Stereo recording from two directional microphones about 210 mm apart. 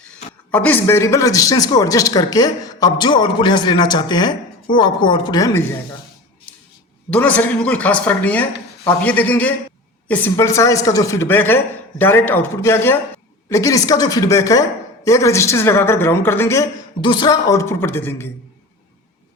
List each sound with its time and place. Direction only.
0.5 s a woman's voice: 10° left (ahead or behind)
7.1 s speech: 5° left (ahead or behind)